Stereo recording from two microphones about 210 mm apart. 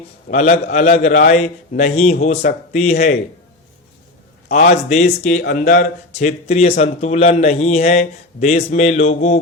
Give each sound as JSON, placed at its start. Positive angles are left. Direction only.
{"t": 0.3, "sound": "speech", "side_deg": 35}
{"t": 4.4, "sound": "speech", "side_deg": 35}